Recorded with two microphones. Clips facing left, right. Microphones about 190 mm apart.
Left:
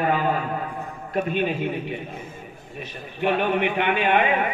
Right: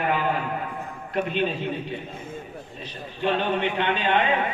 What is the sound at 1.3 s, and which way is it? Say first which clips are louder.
Speech: left 2 dB; 15° left (ahead or behind).